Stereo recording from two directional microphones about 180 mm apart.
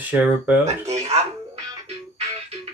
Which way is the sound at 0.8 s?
35° right (ahead or behind).